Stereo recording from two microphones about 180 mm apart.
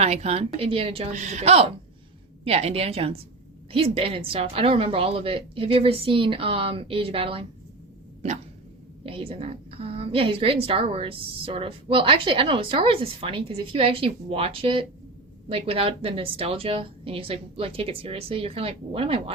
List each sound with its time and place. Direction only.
0.0 s a woman's voice: 35° right (ahead or behind)
9.0 s a woman's voice: 30° right (ahead or behind)